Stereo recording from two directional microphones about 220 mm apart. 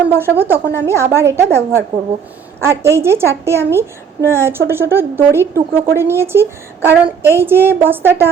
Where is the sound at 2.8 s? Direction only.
10° right (ahead or behind).